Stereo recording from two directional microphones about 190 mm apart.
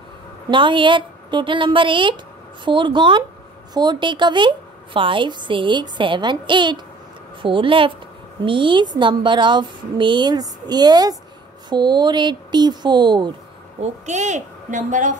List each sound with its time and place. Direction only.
0.5 s a woman's voice: 25° right (ahead or behind)
13.7 s a woman's voice: 35° right (ahead or behind)